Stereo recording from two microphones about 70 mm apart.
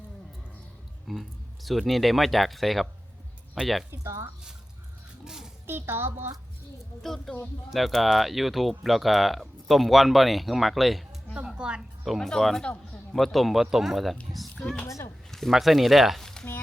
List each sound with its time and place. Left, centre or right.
1.0 s speech: centre
3.9 s speech: right
5.2 s a sound: centre
5.6 s a child's voice: right
7.0 s speech: centre
11.4 s a woman's voice: centre
12.0 s speech: centre
14.8 s speech: left
15.3 s speech: centre